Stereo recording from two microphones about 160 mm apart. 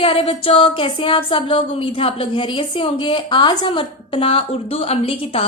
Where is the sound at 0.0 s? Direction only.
35° left (ahead or behind).